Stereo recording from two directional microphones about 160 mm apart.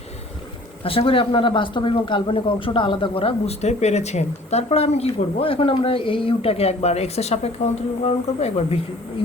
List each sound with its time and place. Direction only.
0.9 s speech: 35° left (ahead or behind)